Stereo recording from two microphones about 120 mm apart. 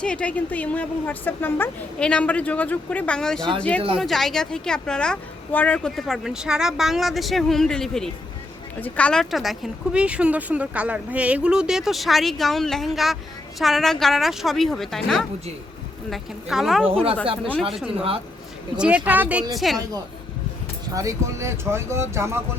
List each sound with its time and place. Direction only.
0.0 s a woman's voice: 10° left (ahead or behind)
3.8 s a woman's voice: 50° right (ahead or behind)
4.0 s a woman's voice: centre (ahead or behind)
9.3 s speech: centre (ahead or behind)
18.8 s speech: 10° right (ahead or behind)
19.5 s speech: centre (ahead or behind)
20.9 s speech: 25° right (ahead or behind)